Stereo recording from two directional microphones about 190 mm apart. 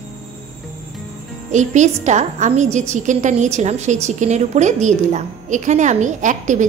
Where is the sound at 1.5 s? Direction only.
40° right (ahead or behind).